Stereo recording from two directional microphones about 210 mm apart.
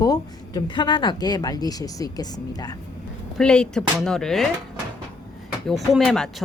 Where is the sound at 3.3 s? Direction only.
5° left (ahead or behind).